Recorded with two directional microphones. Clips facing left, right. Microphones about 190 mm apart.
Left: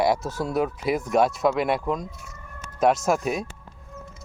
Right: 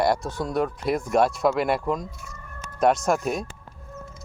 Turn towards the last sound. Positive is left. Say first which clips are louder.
# even
turn(degrees=0)  # may be behind; listen again after turning